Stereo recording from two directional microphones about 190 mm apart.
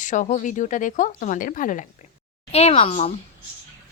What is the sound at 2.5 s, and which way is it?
Speech, 35° left (ahead or behind).